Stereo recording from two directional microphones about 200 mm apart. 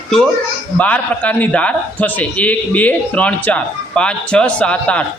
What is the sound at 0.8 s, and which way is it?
A man's voice, 5° left (ahead or behind).